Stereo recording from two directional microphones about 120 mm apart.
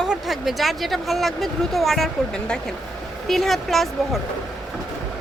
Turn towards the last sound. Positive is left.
turn(degrees=0)  # may be behind; listen again after turning